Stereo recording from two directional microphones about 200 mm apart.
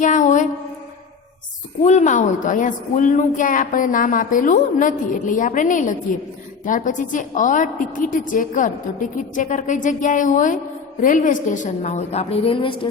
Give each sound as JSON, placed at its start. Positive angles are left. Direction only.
{"t": 0.0, "sound": "mantra", "side_deg": 40}
{"t": 1.8, "sound": "a woman's voice", "side_deg": 35}